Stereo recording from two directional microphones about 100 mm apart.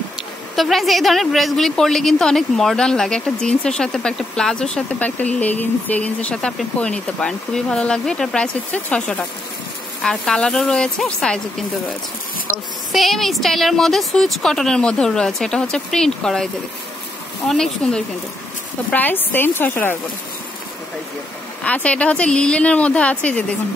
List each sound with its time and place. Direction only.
0.6 s a woman's voice: centre (ahead or behind)
12.9 s a woman's voice: centre (ahead or behind)
17.5 s a woman's voice: 5° left (ahead or behind)
18.9 s speech: 15° left (ahead or behind)
21.6 s speech: 15° left (ahead or behind)